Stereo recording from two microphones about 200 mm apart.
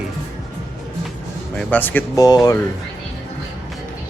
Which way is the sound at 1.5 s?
10° left (ahead or behind).